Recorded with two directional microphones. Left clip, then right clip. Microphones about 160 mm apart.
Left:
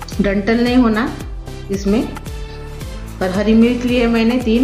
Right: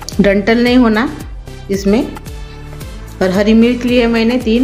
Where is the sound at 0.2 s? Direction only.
45° right (ahead or behind).